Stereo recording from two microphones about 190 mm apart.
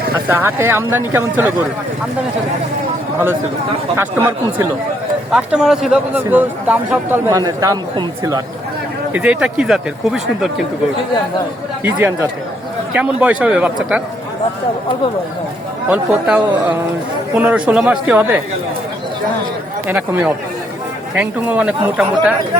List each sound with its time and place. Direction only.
0.3 s speech: 15° right (ahead or behind)
3.9 s speech: 15° right (ahead or behind)
9.1 s speech: 5° right (ahead or behind)
11.8 s speech: 10° right (ahead or behind)
15.9 s speech: 5° right (ahead or behind)
19.9 s speech: 5° right (ahead or behind)